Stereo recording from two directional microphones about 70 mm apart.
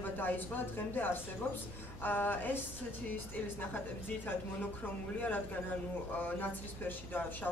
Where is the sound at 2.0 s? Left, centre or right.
Left.